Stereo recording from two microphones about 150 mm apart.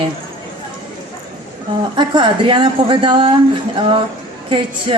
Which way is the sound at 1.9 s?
30° right (ahead or behind).